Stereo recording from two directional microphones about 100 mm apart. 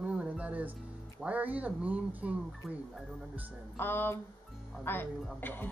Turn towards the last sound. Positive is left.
turn(degrees=20)  # may be behind; listen again after turning